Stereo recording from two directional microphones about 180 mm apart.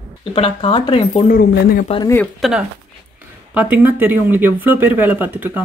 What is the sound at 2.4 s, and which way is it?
Speech, centre (ahead or behind).